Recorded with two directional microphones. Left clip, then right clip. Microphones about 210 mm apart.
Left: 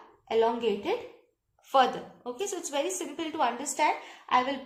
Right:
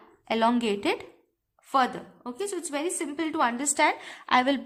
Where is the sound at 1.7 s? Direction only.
25° right (ahead or behind); by 4.5 s 45° right (ahead or behind).